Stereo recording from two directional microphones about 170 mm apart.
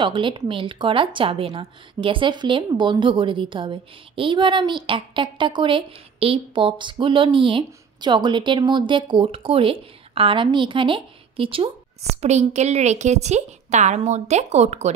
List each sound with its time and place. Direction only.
0.0 s a woman's voice: 30° right (ahead or behind)